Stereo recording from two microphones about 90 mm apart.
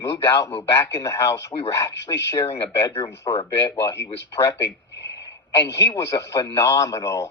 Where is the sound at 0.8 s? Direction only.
30° left (ahead or behind).